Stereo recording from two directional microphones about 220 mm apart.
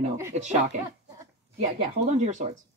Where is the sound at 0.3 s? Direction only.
35° right (ahead or behind).